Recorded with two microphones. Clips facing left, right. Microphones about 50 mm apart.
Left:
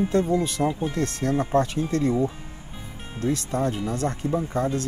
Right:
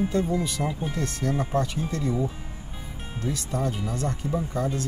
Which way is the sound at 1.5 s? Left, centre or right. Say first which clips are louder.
Left 4 dB; left.